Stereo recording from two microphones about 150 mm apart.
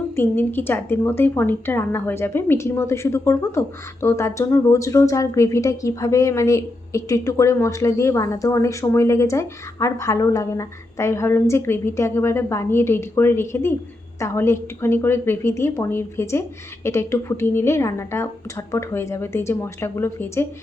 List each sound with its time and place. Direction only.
0.2 s a woman's voice: 15° left (ahead or behind)